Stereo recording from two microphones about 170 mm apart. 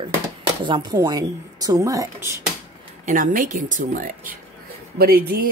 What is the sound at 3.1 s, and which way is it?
Speech, 50° right (ahead or behind).